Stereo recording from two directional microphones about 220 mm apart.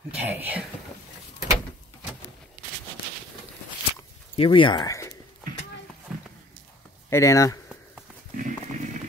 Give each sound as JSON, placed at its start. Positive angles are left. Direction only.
{"t": 0.2, "sound": "speech", "side_deg": -5}
{"t": 4.4, "sound": "speech", "side_deg": 20}
{"t": 7.1, "sound": "speech", "side_deg": 15}
{"t": 8.4, "sound": "a sound", "side_deg": -35}